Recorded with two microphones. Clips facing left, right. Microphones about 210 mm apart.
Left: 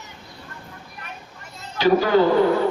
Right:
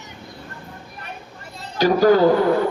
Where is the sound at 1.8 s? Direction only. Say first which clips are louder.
Right 1 dB; 40° right (ahead or behind).